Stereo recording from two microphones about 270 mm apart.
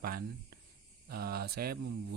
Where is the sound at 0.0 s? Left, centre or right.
Right.